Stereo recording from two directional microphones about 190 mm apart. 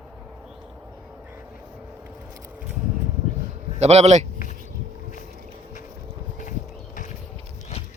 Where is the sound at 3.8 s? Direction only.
35° right (ahead or behind).